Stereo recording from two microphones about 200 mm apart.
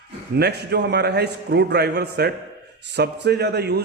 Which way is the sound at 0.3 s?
55° right (ahead or behind).